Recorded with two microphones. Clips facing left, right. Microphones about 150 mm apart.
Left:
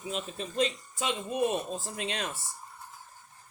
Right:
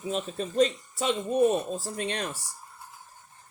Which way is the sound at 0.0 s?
40° right (ahead or behind).